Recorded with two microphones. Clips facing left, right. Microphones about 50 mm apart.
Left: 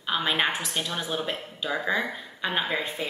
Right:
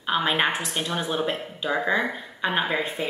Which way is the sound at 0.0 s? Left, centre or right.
Centre.